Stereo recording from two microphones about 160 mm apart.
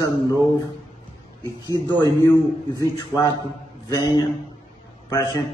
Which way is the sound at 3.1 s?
25° left (ahead or behind).